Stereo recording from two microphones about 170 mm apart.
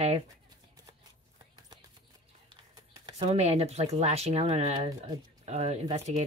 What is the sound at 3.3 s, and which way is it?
Speech, 40° right (ahead or behind).